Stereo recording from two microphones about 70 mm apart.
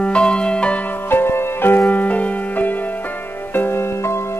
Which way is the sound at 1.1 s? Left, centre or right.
Left.